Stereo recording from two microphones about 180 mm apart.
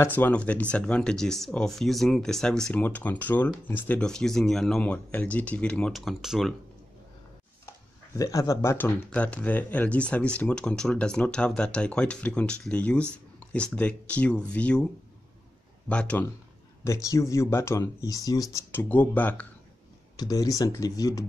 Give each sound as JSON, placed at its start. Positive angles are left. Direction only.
{"t": 0.0, "sound": "speech", "side_deg": 10}
{"t": 8.2, "sound": "speech", "side_deg": 20}
{"t": 15.9, "sound": "speech", "side_deg": 5}
{"t": 20.2, "sound": "speech", "side_deg": 20}